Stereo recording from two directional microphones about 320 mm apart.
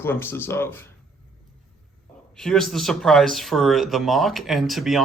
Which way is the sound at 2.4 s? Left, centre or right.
Centre.